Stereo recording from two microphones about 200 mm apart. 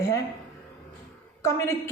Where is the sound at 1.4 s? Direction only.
15° left (ahead or behind).